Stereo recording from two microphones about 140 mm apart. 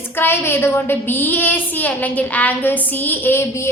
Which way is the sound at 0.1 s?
15° left (ahead or behind).